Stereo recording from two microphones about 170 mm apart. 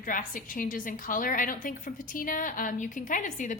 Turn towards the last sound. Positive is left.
turn(degrees=50)  # may be behind; listen again after turning